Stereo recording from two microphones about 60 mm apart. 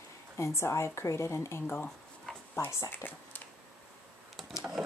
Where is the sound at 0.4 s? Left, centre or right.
Left.